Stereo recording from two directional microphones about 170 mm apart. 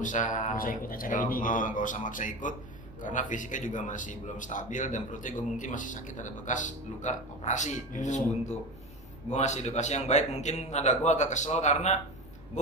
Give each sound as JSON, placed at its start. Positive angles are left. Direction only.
{"t": 0.0, "sound": "a man's voice", "side_deg": 50}